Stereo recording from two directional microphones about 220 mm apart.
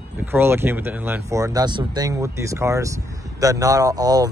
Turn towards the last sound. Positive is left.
turn(degrees=-15)  # may be behind; listen again after turning